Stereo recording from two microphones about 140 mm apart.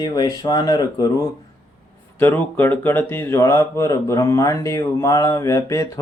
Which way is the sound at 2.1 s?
15° left (ahead or behind).